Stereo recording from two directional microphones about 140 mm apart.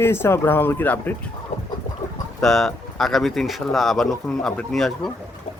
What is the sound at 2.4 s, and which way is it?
Speech, centre (ahead or behind).